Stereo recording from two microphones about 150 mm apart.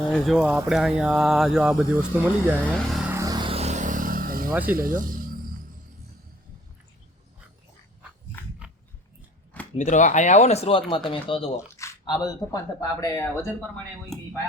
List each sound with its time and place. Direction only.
0.1 s speech: centre (ahead or behind)
2.6 s speech: 5° left (ahead or behind)
3.1 s a sound: 20° right (ahead or behind)
3.5 s vehicle: 50° right (ahead or behind); by 4.5 s 75° right (ahead or behind)
4.7 s speech: 70° right (ahead or behind)
8.4 s a sound: 15° left (ahead or behind)
9.7 s speech: 55° left (ahead or behind); by 11.5 s 35° left (ahead or behind)
11.5 s squish: 20° left (ahead or behind)
12.0 s speech: 30° left (ahead or behind)